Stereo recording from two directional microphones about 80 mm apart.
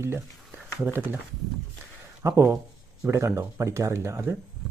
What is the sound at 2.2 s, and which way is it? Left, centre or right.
Speech, right.